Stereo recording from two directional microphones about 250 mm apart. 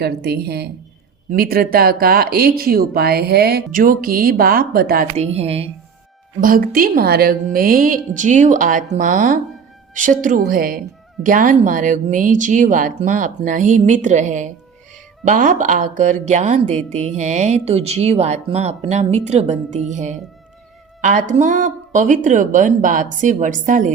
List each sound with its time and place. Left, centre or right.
0.0 s speech: right
5.1 s speech: right
6.4 s speech: right